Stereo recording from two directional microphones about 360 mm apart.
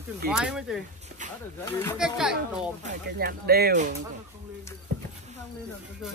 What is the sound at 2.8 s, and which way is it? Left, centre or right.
Speech, right.